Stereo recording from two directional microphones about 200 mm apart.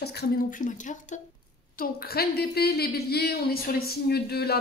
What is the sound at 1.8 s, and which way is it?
Speech, 50° left (ahead or behind).